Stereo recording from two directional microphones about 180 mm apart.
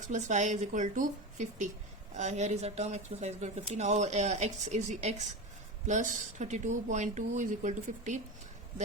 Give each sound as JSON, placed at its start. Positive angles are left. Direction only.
{"t": 0.1, "sound": "speech", "side_deg": -45}